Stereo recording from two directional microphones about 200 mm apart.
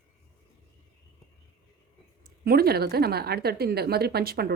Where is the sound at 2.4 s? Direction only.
50° right (ahead or behind).